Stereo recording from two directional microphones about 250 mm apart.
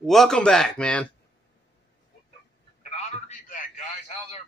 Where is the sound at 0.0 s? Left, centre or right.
Centre.